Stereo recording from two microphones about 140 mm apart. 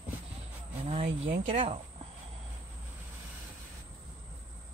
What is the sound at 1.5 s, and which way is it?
Speech, 40° right (ahead or behind).